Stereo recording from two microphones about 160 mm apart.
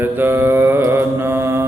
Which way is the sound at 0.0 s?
15° right (ahead or behind).